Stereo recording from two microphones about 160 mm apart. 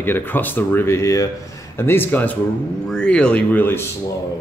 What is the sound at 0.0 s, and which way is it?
Speech, 15° left (ahead or behind).